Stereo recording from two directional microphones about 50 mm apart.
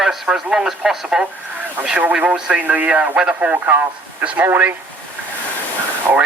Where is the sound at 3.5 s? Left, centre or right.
Right.